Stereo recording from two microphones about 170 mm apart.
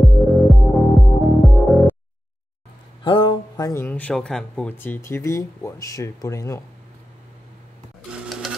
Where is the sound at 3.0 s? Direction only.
30° left (ahead or behind).